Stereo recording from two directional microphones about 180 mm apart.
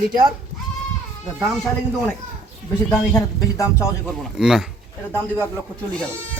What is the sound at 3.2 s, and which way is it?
Speech, 15° left (ahead or behind).